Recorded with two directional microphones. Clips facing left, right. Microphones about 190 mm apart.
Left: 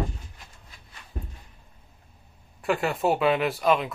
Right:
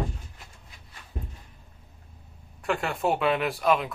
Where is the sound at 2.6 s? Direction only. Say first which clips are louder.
Left 3 dB; 5° left (ahead or behind).